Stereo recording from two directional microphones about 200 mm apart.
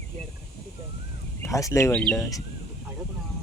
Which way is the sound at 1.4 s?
15° left (ahead or behind).